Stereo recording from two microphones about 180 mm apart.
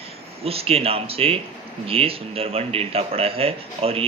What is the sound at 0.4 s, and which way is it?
A man's voice, 35° right (ahead or behind).